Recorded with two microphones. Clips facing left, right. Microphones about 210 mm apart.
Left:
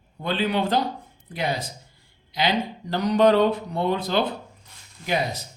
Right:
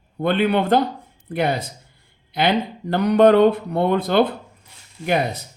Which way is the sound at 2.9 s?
60° right (ahead or behind).